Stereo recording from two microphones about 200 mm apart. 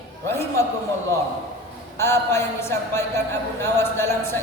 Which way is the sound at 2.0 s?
10° left (ahead or behind).